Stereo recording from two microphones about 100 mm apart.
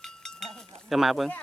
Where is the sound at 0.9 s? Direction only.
Centre (ahead or behind).